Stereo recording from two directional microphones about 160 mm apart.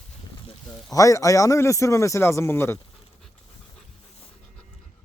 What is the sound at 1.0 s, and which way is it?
Speech, 20° left (ahead or behind).